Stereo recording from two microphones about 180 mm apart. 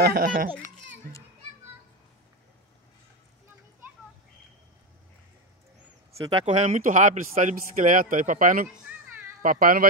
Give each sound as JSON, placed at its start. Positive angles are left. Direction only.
{"t": 0.0, "sound": "a child's voice", "side_deg": -55}
{"t": 6.1, "sound": "speech", "side_deg": -25}
{"t": 6.4, "sound": "speech", "side_deg": -40}